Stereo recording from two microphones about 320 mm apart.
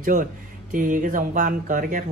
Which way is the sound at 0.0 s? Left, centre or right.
Right.